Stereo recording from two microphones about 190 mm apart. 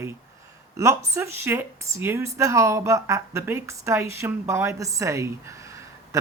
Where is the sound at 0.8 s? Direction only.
15° right (ahead or behind).